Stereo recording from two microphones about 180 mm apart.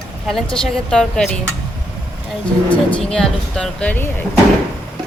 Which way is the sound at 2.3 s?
5° left (ahead or behind).